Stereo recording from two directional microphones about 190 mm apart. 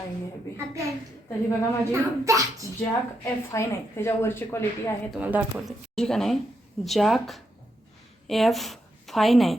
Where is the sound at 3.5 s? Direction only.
15° left (ahead or behind).